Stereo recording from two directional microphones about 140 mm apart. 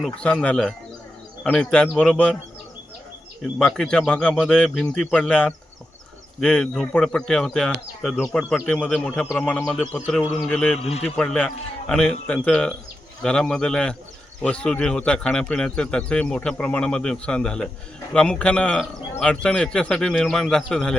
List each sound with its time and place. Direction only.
0.0 s speech: 5° left (ahead or behind)
3.6 s speech: 5° left (ahead or behind)
10.8 s speech: 45° left (ahead or behind)
11.0 s speech: 5° left (ahead or behind)